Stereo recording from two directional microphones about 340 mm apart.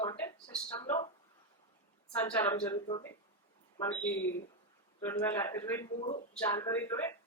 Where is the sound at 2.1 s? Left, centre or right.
Centre.